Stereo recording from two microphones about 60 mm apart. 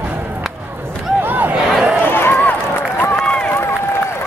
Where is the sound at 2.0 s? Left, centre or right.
Left.